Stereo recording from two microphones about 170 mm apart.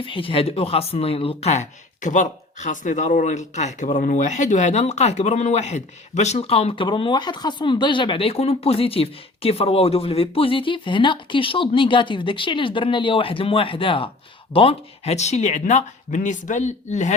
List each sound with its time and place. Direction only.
0.0 s speech: 30° left (ahead or behind)